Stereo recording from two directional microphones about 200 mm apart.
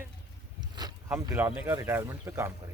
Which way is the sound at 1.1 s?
10° right (ahead or behind).